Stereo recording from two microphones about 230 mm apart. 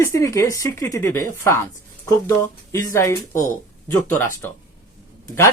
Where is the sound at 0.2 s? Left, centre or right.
Centre.